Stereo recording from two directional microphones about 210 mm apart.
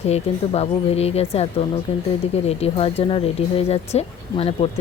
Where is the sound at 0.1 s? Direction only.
30° left (ahead or behind).